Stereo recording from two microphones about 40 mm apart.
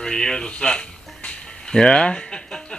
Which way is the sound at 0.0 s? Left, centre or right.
Centre.